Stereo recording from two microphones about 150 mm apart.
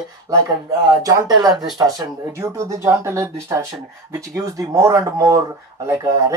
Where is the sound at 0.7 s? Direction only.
25° right (ahead or behind).